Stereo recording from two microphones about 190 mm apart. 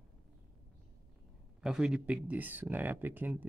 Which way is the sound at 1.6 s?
5° right (ahead or behind).